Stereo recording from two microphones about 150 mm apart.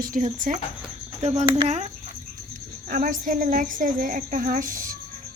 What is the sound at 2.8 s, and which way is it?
A woman's voice, 65° right (ahead or behind).